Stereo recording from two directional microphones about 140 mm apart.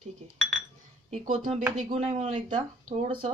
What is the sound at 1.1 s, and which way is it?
Speech, 60° right (ahead or behind).